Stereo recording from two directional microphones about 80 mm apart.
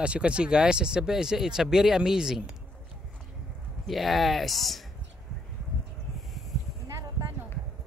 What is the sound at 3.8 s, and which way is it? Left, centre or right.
Speech, centre.